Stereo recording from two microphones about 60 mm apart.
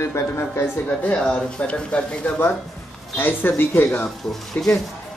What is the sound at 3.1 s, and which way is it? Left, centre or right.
Speech, left.